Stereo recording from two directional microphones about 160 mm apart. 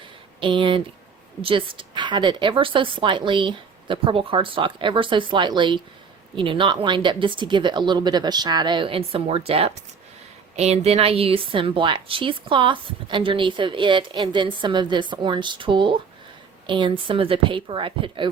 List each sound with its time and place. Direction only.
0.3 s a woman's voice: 30° right (ahead or behind)